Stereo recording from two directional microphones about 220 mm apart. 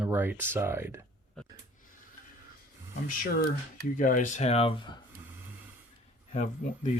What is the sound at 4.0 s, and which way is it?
Speech, 35° left (ahead or behind).